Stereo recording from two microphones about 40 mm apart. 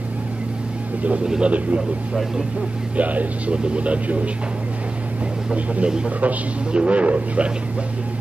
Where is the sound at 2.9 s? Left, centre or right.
Right.